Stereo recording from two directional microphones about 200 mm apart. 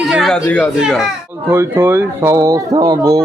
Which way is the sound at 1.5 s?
10° right (ahead or behind).